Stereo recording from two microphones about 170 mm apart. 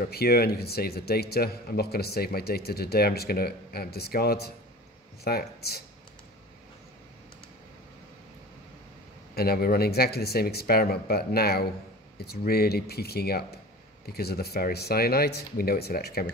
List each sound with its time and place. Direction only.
0.1 s speech: 65° left (ahead or behind)
9.3 s speech: 65° left (ahead or behind)